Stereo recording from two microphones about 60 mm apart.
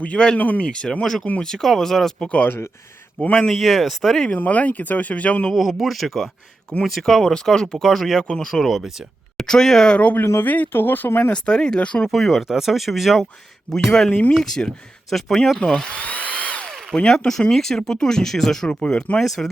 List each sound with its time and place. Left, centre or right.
0.0 s speech: centre
0.7 s speech: centre
3.5 s speech: centre
4.4 s speech: left
5.5 s speech: centre
10.0 s speech: left
11.3 s speech: centre
12.0 s speech: centre
14.1 s speech: left
14.3 s speech: centre
15.7 s drill: centre
17.0 s speech: centre